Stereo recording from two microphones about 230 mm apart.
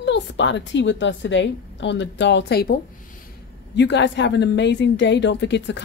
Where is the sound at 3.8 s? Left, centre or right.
Left.